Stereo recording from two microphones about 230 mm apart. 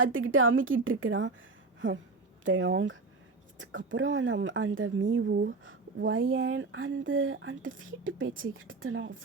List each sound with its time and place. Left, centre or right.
0.0 s speech: right
2.4 s speech: right
5.6 s speech: right